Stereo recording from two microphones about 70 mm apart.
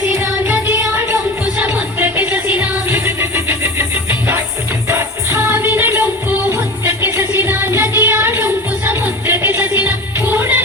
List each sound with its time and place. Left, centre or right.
1.5 s music: right